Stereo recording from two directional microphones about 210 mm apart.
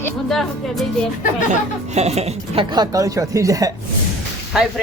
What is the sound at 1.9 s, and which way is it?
Speech, 30° right (ahead or behind).